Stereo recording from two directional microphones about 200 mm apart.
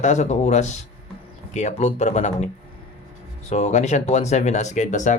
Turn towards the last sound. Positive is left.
turn(degrees=35)  # may be behind; listen again after turning